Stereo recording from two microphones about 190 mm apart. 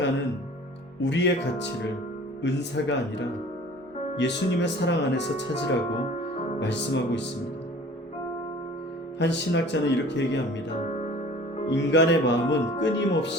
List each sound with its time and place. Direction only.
1.0 s speech: 65° left (ahead or behind)
9.1 s speech: 65° left (ahead or behind)
11.7 s speech: 65° left (ahead or behind)